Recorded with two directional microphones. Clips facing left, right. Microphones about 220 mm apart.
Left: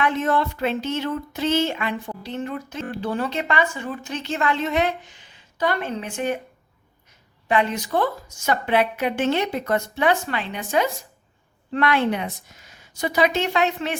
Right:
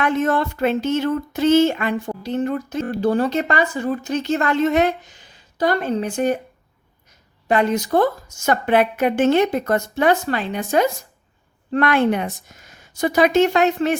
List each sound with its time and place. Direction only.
0.0 s speech: 45° right (ahead or behind)
7.4 s a woman's voice: 40° right (ahead or behind)